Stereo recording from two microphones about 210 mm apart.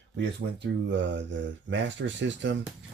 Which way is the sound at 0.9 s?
60° right (ahead or behind).